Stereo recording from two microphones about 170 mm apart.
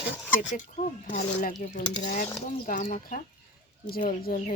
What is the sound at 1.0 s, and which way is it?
Speech, 50° left (ahead or behind).